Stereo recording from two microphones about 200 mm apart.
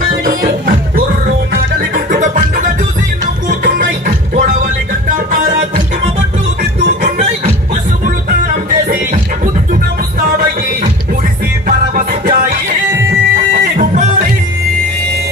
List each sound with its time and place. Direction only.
0.2 s music: 45° right (ahead or behind)
6.6 s music: 30° right (ahead or behind)
10.2 s music: 45° right (ahead or behind)
13.7 s music: 45° right (ahead or behind)